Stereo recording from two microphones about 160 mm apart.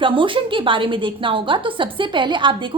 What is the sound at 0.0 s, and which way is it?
A woman's voice, 30° right (ahead or behind).